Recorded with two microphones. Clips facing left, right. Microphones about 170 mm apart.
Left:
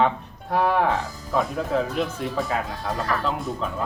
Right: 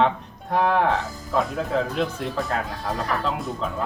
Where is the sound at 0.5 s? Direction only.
5° left (ahead or behind).